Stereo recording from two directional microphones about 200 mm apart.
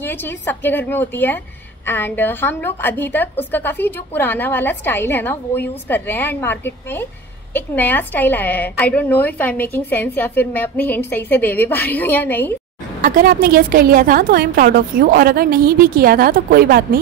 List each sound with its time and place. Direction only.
0.0 s a woman's voice: 10° left (ahead or behind)
13.0 s a woman's voice: 45° right (ahead or behind)